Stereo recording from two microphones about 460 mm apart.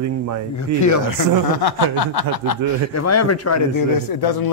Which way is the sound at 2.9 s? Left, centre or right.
Left.